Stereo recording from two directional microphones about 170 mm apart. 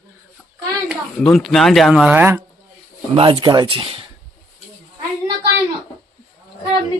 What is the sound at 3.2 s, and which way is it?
Speech, 30° right (ahead or behind).